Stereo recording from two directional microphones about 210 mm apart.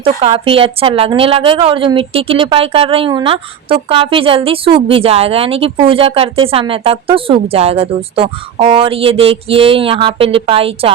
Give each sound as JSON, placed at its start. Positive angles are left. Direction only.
{"t": 0.0, "sound": "a woman's voice", "side_deg": -25}